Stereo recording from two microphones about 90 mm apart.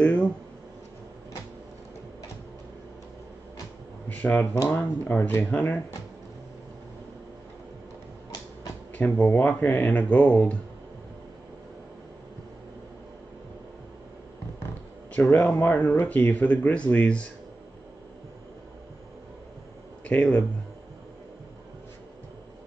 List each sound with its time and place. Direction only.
0.0 s a sound: 10° left (ahead or behind)
4.1 s speech: 20° left (ahead or behind)
8.9 s speech: 20° left (ahead or behind)
15.3 s speech: 20° left (ahead or behind)
20.1 s speech: 15° left (ahead or behind)